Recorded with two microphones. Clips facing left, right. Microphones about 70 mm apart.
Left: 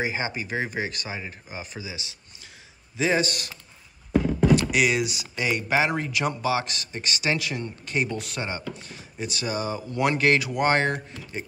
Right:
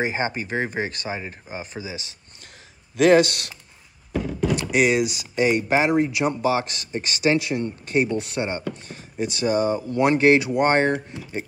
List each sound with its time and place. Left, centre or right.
0.0 s speech: right
3.0 s speech: right
4.6 s a sound: right
5.0 s speech: left
5.3 s speech: right
10.9 s speech: centre